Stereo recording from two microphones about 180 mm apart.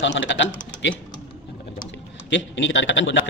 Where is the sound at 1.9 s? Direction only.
90° left.